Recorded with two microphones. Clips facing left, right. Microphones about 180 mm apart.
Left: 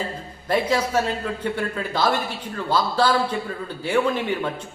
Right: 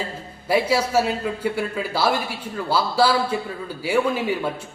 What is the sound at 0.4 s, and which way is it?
A man's voice, 10° right (ahead or behind).